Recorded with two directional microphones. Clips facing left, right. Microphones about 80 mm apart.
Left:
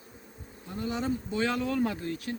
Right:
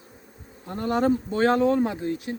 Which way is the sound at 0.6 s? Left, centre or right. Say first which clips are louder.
Right 9 dB; right.